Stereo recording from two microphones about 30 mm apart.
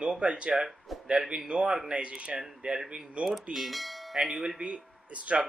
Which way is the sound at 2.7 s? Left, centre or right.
Right.